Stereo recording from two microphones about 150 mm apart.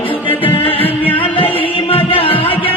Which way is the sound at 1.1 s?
35° left (ahead or behind).